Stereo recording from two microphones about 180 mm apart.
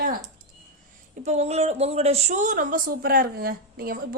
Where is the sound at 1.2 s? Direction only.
35° right (ahead or behind).